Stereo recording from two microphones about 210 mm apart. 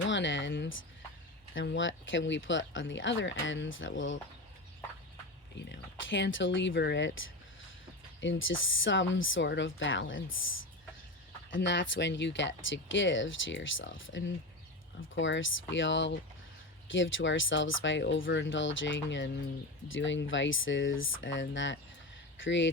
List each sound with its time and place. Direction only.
0.1 s a sound: 60° left (ahead or behind)
1.5 s speech: 65° left (ahead or behind)
5.5 s speech: 60° left (ahead or behind)
11.5 s speech: 60° left (ahead or behind)